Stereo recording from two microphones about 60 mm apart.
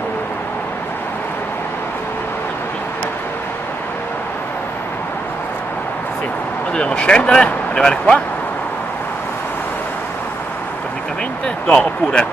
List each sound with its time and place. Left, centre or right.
6.7 s speech: centre
11.4 s speech: left